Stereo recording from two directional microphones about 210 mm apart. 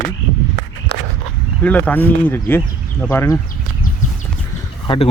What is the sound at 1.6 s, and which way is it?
Speech, 10° left (ahead or behind).